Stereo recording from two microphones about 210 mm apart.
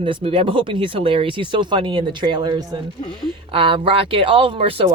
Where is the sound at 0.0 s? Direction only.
25° right (ahead or behind).